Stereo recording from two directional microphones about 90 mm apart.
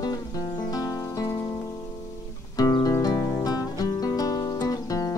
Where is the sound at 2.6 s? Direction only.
45° left (ahead or behind).